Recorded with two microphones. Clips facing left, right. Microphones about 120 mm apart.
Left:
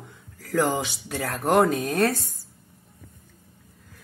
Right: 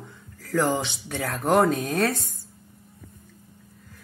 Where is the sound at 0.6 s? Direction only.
5° left (ahead or behind).